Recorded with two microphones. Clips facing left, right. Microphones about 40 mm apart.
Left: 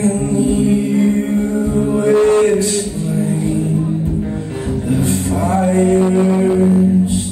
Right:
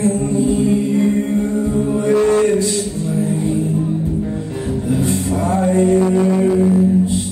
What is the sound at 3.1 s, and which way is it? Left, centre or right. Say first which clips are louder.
Music: left 1 dB; left.